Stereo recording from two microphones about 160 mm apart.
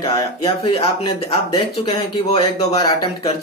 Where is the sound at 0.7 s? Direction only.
35° left (ahead or behind).